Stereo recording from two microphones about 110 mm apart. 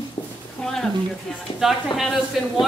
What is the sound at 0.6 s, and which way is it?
Speech, 5° left (ahead or behind).